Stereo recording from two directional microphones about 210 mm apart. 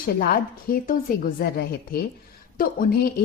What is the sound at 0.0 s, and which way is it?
A woman's voice, 45° left (ahead or behind).